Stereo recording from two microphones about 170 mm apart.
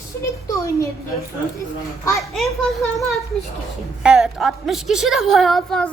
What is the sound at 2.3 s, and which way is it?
A woman's voice, centre (ahead or behind).